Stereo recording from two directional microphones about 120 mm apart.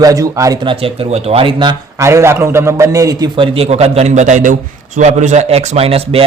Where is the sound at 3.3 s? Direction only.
50° right (ahead or behind); by 4.5 s 90° right.